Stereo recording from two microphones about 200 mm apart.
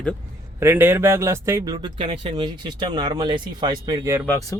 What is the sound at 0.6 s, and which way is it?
Speech, 10° right (ahead or behind).